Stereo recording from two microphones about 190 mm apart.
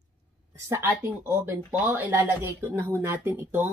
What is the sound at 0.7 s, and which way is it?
Speech, 15° right (ahead or behind).